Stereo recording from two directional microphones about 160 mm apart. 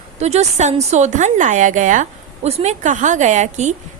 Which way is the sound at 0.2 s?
45° right (ahead or behind).